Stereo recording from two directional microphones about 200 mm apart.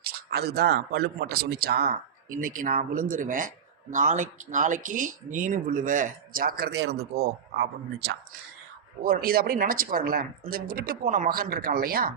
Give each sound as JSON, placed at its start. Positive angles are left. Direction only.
{"t": 0.0, "sound": "speech", "side_deg": -55}